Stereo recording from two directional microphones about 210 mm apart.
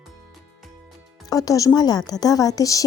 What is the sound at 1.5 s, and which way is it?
A woman's voice, 15° left (ahead or behind).